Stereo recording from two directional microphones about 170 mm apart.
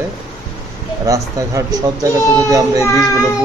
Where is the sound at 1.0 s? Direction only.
20° right (ahead or behind).